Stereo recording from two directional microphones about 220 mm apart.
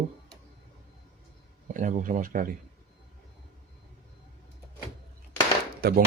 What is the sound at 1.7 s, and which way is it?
Speech, 35° right (ahead or behind).